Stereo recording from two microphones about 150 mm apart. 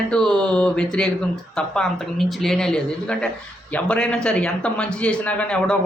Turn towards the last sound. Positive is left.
turn(degrees=10)  # may be behind; listen again after turning